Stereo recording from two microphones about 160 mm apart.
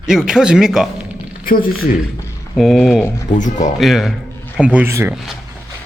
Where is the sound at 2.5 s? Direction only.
Centre (ahead or behind).